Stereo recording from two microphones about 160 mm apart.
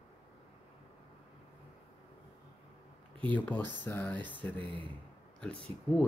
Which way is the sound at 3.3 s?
10° left (ahead or behind).